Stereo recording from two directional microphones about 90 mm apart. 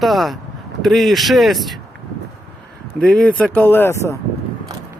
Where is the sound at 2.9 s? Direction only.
10° left (ahead or behind); by 4.1 s 30° left (ahead or behind).